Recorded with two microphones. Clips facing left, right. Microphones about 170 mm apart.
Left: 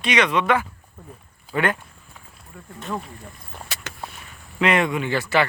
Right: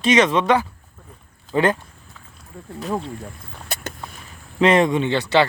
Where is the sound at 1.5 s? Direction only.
25° right (ahead or behind).